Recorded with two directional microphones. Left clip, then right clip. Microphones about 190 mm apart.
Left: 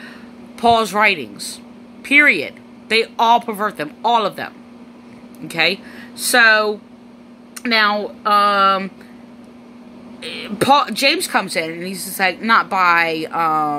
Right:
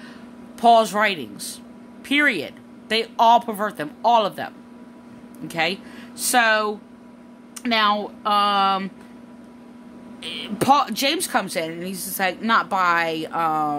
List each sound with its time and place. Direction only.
0.6 s speech: 20° right (ahead or behind)
5.5 s speech: 20° right (ahead or behind)
10.2 s speech: 20° right (ahead or behind)